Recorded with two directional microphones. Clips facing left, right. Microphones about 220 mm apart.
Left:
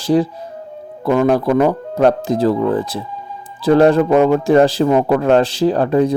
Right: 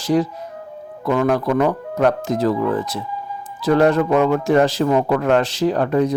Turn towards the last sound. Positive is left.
turn(degrees=30)  # may be behind; listen again after turning